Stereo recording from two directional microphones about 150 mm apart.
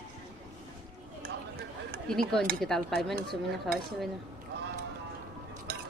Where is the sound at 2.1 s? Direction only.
5° left (ahead or behind).